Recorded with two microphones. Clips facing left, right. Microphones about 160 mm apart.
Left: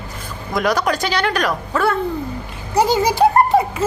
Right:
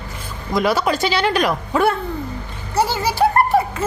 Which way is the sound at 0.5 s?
5° right (ahead or behind).